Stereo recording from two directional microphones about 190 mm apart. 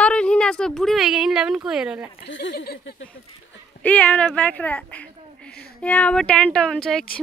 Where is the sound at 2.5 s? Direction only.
50° left (ahead or behind).